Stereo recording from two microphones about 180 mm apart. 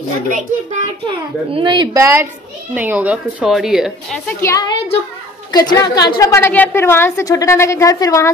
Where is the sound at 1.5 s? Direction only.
25° right (ahead or behind).